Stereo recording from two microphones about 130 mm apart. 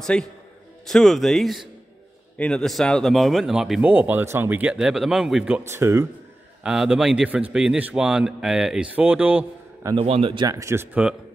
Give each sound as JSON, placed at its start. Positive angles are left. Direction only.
{"t": 0.0, "sound": "a man's voice", "side_deg": 5}
{"t": 3.9, "sound": "speech", "side_deg": -15}
{"t": 5.6, "sound": "speech", "side_deg": -20}
{"t": 6.6, "sound": "a man's voice", "side_deg": -5}
{"t": 9.9, "sound": "a man's voice", "side_deg": -45}
{"t": 10.4, "sound": "speech", "side_deg": -25}